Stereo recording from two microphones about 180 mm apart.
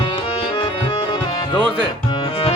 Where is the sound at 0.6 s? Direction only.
25° left (ahead or behind).